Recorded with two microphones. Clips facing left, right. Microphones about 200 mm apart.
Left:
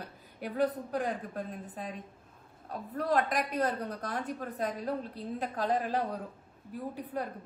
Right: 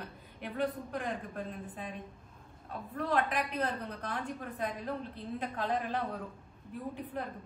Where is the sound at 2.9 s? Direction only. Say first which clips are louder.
Left 2 dB; 40° left (ahead or behind).